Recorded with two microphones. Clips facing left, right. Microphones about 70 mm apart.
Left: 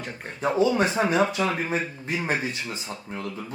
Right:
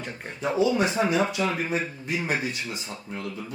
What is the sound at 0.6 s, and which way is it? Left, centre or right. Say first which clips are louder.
A man's voice: left 1 dB; left.